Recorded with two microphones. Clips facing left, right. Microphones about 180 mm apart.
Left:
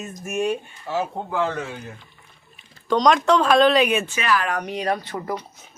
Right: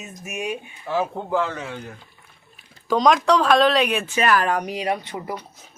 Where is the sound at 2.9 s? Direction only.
5° right (ahead or behind).